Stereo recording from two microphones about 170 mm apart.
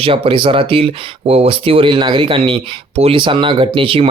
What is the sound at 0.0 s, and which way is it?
Speech, 30° right (ahead or behind).